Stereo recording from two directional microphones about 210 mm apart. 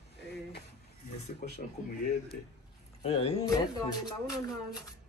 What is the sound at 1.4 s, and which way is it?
Speech, 40° left (ahead or behind).